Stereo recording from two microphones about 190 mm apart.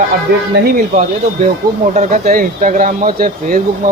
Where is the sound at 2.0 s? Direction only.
40° right (ahead or behind).